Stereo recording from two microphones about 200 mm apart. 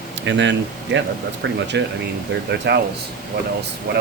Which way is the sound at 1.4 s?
70° right (ahead or behind).